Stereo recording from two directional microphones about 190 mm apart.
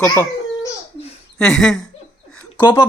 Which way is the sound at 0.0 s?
15° left (ahead or behind).